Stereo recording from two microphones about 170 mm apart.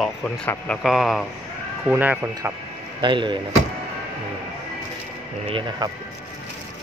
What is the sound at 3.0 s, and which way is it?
Speech, 30° right (ahead or behind).